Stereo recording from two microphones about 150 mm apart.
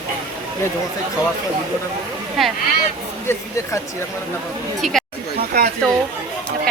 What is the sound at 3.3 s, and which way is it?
Speech, 20° left (ahead or behind).